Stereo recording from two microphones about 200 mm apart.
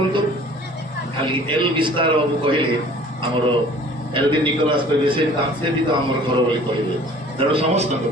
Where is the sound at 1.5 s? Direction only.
25° right (ahead or behind).